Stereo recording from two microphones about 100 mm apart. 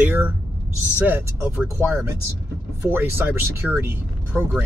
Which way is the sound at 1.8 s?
25° right (ahead or behind).